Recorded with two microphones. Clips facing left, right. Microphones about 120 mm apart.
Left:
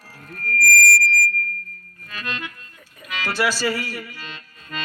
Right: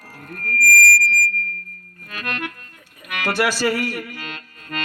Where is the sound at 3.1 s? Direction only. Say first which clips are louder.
Right 2 dB; 55° right (ahead or behind).